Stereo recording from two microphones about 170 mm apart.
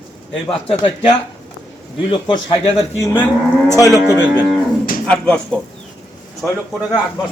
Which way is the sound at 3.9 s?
20° right (ahead or behind).